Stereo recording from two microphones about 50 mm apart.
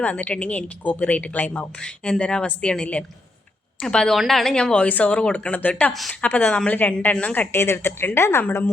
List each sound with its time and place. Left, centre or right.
0.0 s a woman's voice: left; by 4.5 s centre
4.5 s speech: centre
4.8 s a woman's voice: left
7.5 s speech: left